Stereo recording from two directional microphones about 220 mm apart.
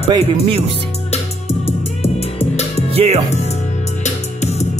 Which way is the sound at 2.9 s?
25° right (ahead or behind).